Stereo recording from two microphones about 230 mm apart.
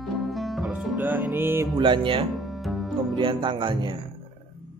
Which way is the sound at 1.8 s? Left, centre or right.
Right.